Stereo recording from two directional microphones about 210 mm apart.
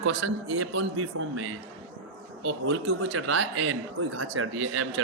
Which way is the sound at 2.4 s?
70° right (ahead or behind).